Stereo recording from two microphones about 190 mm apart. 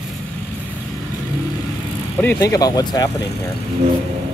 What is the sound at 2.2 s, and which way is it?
Speech, 10° left (ahead or behind).